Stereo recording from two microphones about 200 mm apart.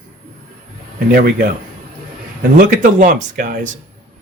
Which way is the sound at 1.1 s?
50° right (ahead or behind).